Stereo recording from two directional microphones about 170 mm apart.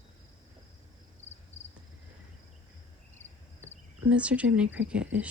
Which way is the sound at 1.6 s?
40° left (ahead or behind).